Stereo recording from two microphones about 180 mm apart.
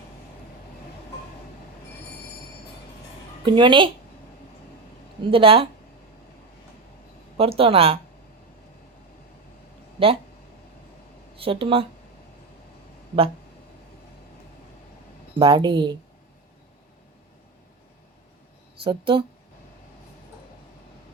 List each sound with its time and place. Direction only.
3.4 s speech: 25° right (ahead or behind)
5.3 s speech: 30° right (ahead or behind)
7.3 s speech: 30° right (ahead or behind)
10.0 s speech: 30° right (ahead or behind)
11.3 s speech: 30° right (ahead or behind)
15.4 s speech: 25° right (ahead or behind)
18.9 s speech: 25° right (ahead or behind)